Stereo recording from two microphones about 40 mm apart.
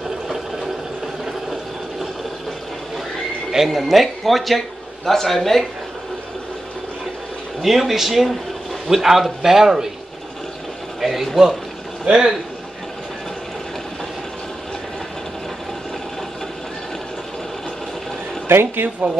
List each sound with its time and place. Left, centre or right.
3.5 s speech: centre
7.6 s speech: centre
11.0 s speech: centre
12.0 s speech: right
18.5 s speech: right